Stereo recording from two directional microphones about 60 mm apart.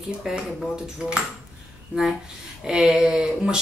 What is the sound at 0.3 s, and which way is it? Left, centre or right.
Speech, centre.